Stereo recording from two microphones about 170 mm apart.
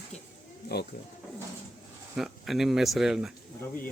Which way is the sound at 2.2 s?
Centre (ahead or behind).